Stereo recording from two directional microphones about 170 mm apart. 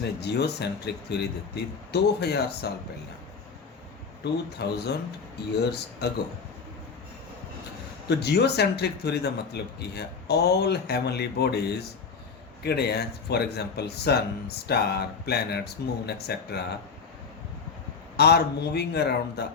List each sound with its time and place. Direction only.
0.0 s speech: 75° left (ahead or behind)
4.2 s speech: 75° left (ahead or behind)
6.0 s speech: 70° left (ahead or behind)
8.1 s speech: 75° left (ahead or behind)
12.6 s speech: 70° left (ahead or behind)
18.2 s speech: 75° left (ahead or behind)